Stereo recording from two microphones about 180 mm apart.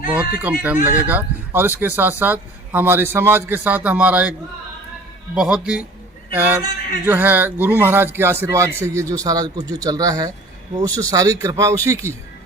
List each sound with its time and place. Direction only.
0.3 s a man's voice: 10° right (ahead or behind)